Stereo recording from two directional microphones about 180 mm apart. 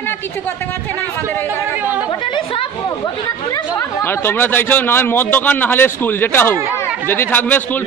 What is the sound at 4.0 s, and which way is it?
A man's voice, 10° left (ahead or behind).